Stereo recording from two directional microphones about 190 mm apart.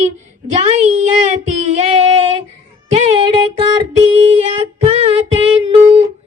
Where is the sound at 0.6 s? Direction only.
35° right (ahead or behind).